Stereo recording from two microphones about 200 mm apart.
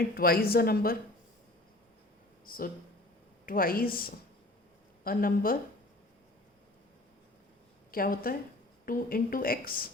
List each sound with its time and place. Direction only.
0.1 s speech: 50° left (ahead or behind)
2.5 s a woman's voice: 45° left (ahead or behind)
5.0 s speech: 45° left (ahead or behind)
7.9 s speech: 45° left (ahead or behind)